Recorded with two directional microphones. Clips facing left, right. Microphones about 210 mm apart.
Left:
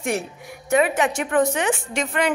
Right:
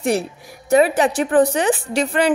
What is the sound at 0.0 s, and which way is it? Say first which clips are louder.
A woman's voice: right 5 dB; 35° right (ahead or behind).